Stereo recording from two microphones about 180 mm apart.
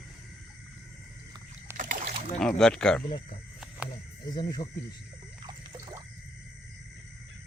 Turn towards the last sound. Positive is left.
turn(degrees=-20)  # may be behind; listen again after turning